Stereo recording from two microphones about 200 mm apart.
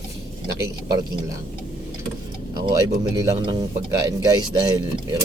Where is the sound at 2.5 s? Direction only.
20° right (ahead or behind).